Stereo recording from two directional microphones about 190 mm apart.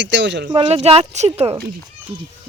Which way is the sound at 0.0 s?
70° right (ahead or behind).